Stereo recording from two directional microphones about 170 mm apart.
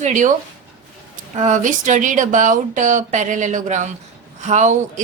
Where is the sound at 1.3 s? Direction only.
45° right (ahead or behind).